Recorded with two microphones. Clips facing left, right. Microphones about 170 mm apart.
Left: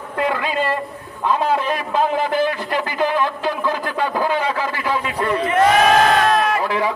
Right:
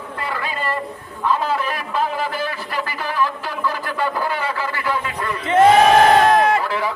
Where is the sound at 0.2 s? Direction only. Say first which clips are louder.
Left 6 dB; 20° left (ahead or behind).